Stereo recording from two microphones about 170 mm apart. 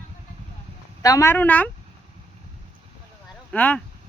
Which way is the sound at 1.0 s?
15° left (ahead or behind).